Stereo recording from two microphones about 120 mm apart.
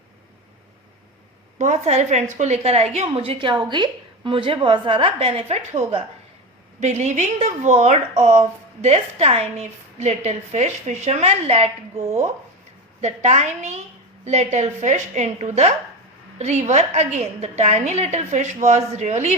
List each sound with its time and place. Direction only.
1.5 s a woman's voice: 80° right; by 3.1 s 60° right (ahead or behind)
3.1 s a woman's voice: 45° right (ahead or behind)
6.8 s a woman's voice: 70° right (ahead or behind)